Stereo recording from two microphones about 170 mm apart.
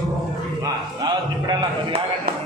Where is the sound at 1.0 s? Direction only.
25° right (ahead or behind).